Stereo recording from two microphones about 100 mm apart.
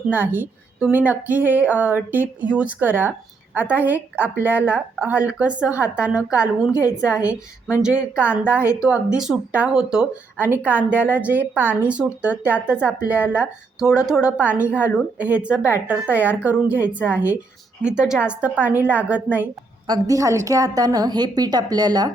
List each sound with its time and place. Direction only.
0.1 s a woman's voice: 20° right (ahead or behind)
10.4 s a woman's voice: 20° right (ahead or behind)
19.9 s a woman's voice: 35° right (ahead or behind)